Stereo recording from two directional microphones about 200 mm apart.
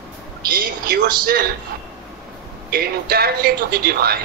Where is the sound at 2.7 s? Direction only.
50° right (ahead or behind).